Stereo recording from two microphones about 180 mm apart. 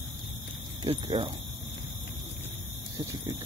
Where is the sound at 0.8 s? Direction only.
25° right (ahead or behind).